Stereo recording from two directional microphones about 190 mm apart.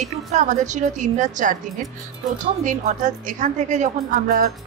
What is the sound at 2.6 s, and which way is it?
Speech, 40° right (ahead or behind).